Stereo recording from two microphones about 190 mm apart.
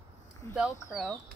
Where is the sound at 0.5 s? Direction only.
5° right (ahead or behind).